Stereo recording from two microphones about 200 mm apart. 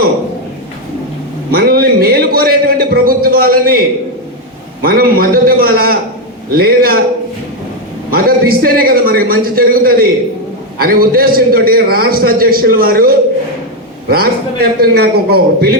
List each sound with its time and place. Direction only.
1.5 s a sound: 50° right (ahead or behind)
4.8 s a man's voice: 45° right (ahead or behind)
8.1 s a man's voice: 45° right (ahead or behind)